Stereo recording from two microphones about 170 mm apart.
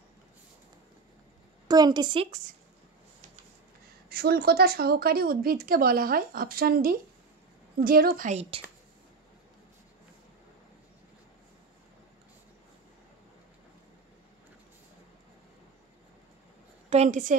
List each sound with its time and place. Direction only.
1.7 s a woman's voice: 25° right (ahead or behind)
4.1 s speech: 65° right (ahead or behind)
8.3 s speech: 35° right (ahead or behind)
16.9 s a woman's voice: 45° right (ahead or behind)